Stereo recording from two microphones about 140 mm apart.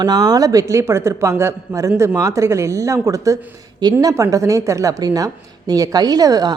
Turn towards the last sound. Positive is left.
turn(degrees=-25)  # may be behind; listen again after turning